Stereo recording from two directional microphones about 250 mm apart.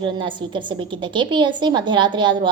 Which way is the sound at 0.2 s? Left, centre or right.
Centre.